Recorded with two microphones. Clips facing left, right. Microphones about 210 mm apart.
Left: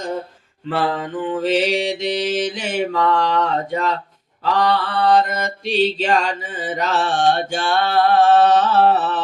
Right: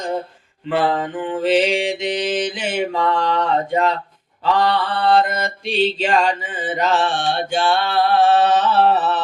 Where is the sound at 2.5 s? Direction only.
45° left (ahead or behind).